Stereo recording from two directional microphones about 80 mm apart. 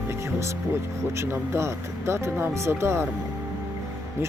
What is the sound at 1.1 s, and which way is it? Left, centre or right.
Speech, right.